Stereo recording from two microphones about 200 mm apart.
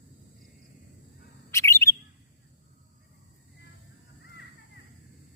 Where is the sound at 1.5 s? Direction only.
15° left (ahead or behind).